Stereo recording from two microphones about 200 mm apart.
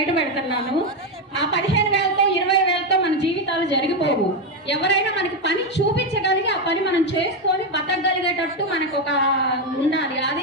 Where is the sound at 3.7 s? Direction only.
60° left (ahead or behind).